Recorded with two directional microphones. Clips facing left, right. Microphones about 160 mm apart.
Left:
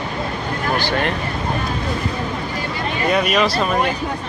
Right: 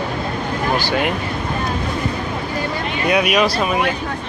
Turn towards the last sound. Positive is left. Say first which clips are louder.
# right 1 dB
turn(degrees=-5)  # may be behind; listen again after turning